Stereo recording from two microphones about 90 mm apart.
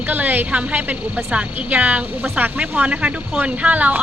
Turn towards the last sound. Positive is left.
turn(degrees=-15)  # may be behind; listen again after turning